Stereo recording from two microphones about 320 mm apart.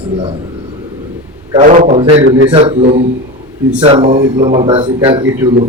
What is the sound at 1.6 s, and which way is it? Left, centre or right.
Speech, right.